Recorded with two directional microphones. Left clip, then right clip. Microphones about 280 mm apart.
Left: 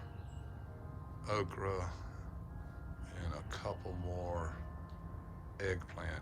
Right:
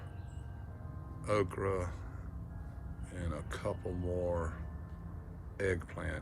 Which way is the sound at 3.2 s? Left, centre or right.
Centre.